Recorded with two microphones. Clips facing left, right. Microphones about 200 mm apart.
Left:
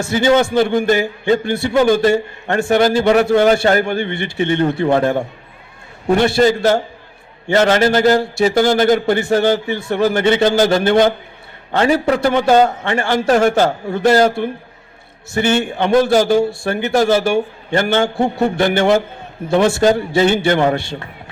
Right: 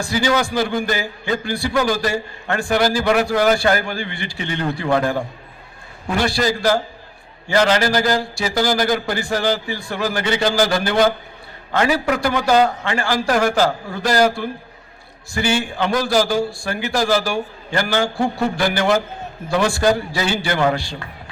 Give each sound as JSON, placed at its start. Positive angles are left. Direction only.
{"t": 0.0, "sound": "a man's voice", "side_deg": 25}